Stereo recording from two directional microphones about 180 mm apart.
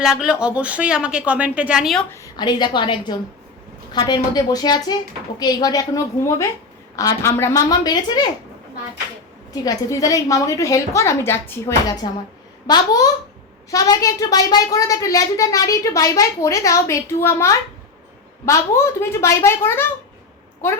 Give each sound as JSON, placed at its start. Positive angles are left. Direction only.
{"t": 0.0, "sound": "speech", "side_deg": -5}
{"t": 2.2, "sound": "a woman's voice", "side_deg": 25}
{"t": 9.5, "sound": "a woman's voice", "side_deg": 20}